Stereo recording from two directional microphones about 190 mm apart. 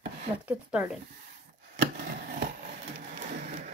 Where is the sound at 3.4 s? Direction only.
40° right (ahead or behind).